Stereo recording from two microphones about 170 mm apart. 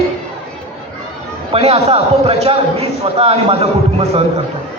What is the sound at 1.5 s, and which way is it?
A man's voice, 35° right (ahead or behind).